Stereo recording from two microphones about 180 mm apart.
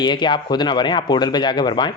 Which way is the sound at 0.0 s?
25° left (ahead or behind).